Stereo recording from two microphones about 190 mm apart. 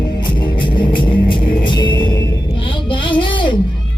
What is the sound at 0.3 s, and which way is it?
Music, 25° left (ahead or behind).